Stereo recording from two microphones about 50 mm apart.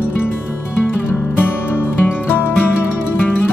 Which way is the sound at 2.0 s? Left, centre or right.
Left.